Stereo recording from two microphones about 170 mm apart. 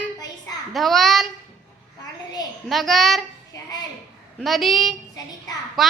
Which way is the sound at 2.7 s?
Centre (ahead or behind).